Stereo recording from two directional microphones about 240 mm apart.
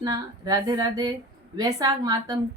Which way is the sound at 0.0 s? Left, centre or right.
Centre.